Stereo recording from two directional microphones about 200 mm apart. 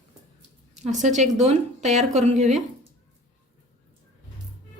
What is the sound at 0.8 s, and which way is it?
A woman's voice, 35° right (ahead or behind).